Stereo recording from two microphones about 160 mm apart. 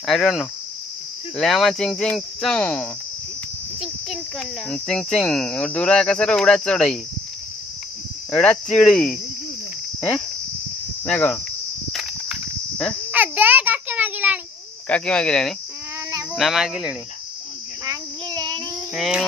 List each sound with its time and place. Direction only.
0.0 s speech: centre (ahead or behind)
3.8 s insect: centre (ahead or behind)
4.6 s speech: 10° left (ahead or behind)
8.3 s speech: 10° left (ahead or behind)
11.1 s speech: 10° left (ahead or behind)
11.9 s a sound: centre (ahead or behind)
14.9 s speech: 5° left (ahead or behind)
17.8 s child singing: 25° right (ahead or behind)
18.9 s speech: 5° right (ahead or behind)